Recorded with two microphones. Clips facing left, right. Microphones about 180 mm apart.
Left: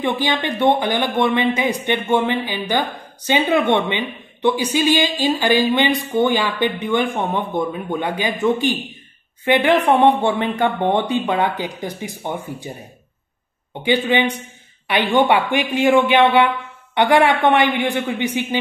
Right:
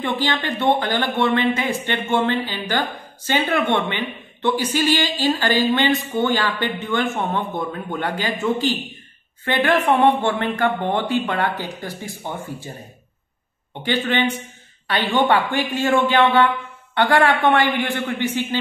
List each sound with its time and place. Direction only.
0.0 s speech: 15° left (ahead or behind)
13.8 s speech: 15° left (ahead or behind)